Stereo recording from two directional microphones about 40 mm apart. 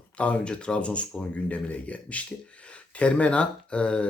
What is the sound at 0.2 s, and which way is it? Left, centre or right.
Speech, left.